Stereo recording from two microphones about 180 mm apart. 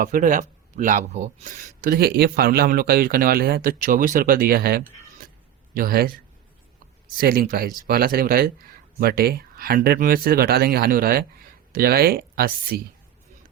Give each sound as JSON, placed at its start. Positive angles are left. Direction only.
{"t": 0.0, "sound": "speech", "side_deg": -45}